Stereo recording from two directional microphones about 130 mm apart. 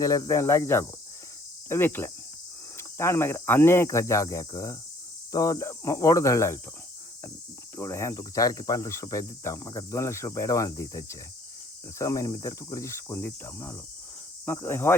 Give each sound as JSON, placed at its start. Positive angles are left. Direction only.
{"t": 0.0, "sound": "speech", "side_deg": 25}
{"t": 7.8, "sound": "speech", "side_deg": 20}